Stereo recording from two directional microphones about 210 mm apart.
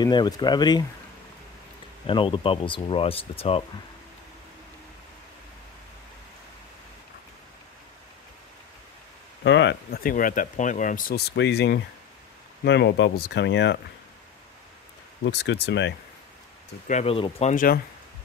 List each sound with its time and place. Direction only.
0.0 s speech: 20° left (ahead or behind)
2.0 s speech: 25° left (ahead or behind)
9.4 s speech: 55° left (ahead or behind)
15.2 s speech: 55° left (ahead or behind)
16.8 s speech: 30° left (ahead or behind)